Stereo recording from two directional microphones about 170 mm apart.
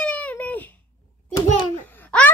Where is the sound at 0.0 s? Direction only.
10° left (ahead or behind).